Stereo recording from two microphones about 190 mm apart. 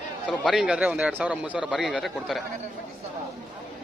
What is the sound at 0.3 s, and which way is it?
A man's voice, centre (ahead or behind).